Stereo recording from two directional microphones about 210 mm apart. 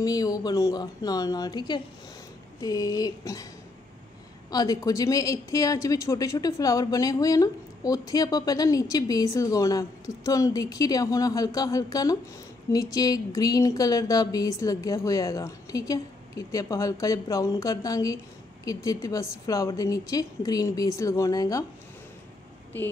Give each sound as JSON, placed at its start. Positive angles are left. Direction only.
{"t": 0.0, "sound": "a woman's voice", "side_deg": 15}
{"t": 4.5, "sound": "a woman's voice", "side_deg": 20}